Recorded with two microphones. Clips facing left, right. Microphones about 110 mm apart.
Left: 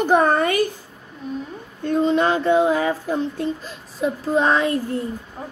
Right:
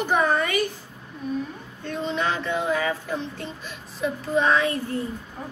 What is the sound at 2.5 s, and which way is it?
Child singing, 35° left (ahead or behind).